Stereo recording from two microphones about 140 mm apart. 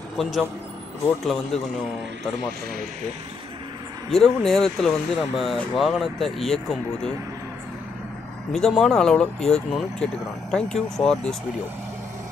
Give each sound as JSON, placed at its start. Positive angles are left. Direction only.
{"t": 0.2, "sound": "speech", "side_deg": 0}
{"t": 4.1, "sound": "speech", "side_deg": 5}
{"t": 8.5, "sound": "speech", "side_deg": 5}